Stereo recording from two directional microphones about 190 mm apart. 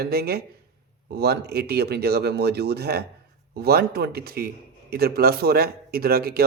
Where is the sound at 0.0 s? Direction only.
55° right (ahead or behind).